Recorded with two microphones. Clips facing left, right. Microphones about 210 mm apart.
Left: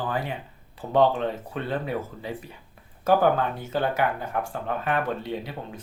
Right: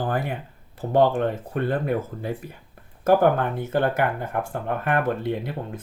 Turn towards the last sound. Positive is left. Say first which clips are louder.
# right 4 dB
turn(degrees=-50)  # may be behind; listen again after turning